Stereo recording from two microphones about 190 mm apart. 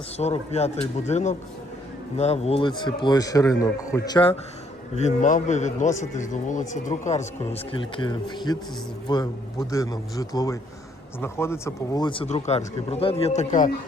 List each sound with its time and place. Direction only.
0.2 s a man's voice: 35° left (ahead or behind)
4.9 s a man's voice: 35° left (ahead or behind)